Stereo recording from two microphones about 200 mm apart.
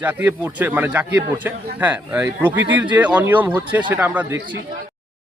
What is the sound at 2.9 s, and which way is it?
A man's voice, 10° right (ahead or behind).